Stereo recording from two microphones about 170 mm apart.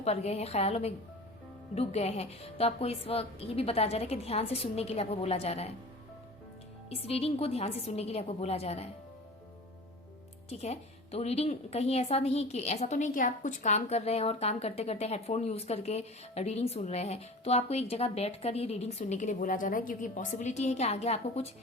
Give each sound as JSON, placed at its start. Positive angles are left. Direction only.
{"t": 0.0, "sound": "a woman's voice", "side_deg": 40}
{"t": 6.9, "sound": "a woman's voice", "side_deg": 35}
{"t": 10.5, "sound": "a woman's voice", "side_deg": 40}